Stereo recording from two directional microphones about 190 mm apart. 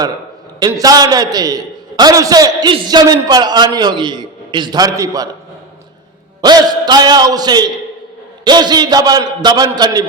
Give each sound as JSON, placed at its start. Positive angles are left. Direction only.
{"t": 0.6, "sound": "a man's voice", "side_deg": -20}
{"t": 6.4, "sound": "a man's voice", "side_deg": -20}